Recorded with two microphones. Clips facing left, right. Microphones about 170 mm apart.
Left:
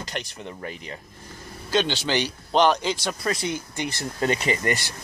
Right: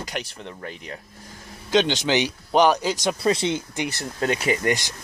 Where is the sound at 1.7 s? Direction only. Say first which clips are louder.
Right 3 dB; 15° right (ahead or behind).